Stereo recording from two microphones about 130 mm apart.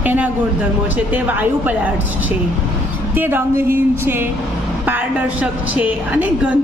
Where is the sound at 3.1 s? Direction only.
15° right (ahead or behind).